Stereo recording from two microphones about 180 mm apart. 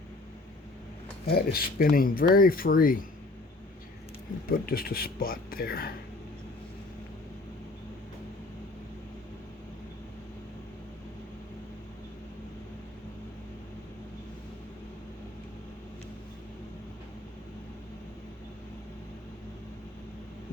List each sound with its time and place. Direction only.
1.3 s speech: 60° left (ahead or behind)
4.4 s speech: 55° left (ahead or behind)